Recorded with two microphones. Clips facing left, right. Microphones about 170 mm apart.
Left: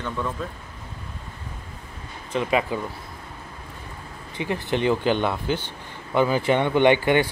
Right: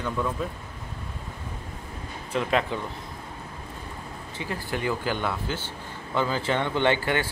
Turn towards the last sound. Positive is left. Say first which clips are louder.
# left 6 dB
turn(degrees=20)  # may be behind; listen again after turning